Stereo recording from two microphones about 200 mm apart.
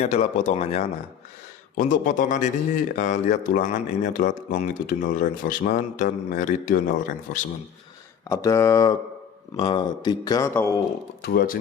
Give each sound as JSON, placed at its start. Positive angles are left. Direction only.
{"t": 0.0, "sound": "speech", "side_deg": 35}
{"t": 8.3, "sound": "a man's voice", "side_deg": 15}
{"t": 11.2, "sound": "speech", "side_deg": 45}